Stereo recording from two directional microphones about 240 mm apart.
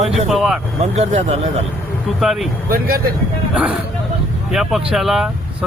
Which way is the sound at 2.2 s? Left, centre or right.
Centre.